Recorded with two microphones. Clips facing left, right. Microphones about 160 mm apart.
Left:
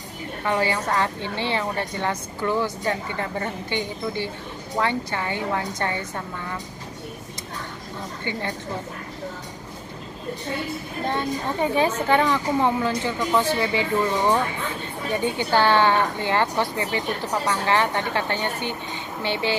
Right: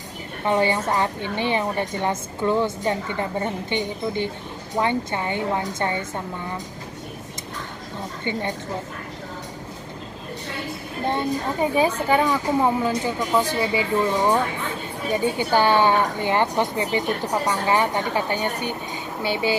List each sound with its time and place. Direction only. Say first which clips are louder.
0.5 s a woman's voice: right 3 dB; 20° right (ahead or behind)
8.3 s a woman's voice: right 3 dB; 20° right (ahead or behind)
11.1 s a woman's voice: right 2 dB; 15° right (ahead or behind)